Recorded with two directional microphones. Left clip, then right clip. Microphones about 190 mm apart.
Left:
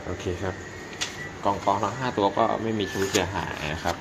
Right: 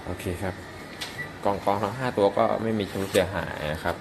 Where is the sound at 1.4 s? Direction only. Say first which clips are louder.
Left 1 dB; 25° right (ahead or behind).